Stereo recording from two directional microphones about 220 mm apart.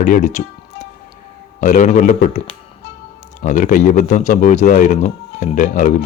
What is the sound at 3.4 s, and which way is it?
Speech, 35° left (ahead or behind).